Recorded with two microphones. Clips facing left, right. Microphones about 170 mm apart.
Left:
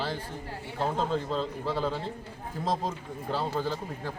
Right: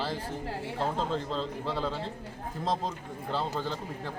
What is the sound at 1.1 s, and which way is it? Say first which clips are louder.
A man's voice: left 2 dB; 5° left (ahead or behind).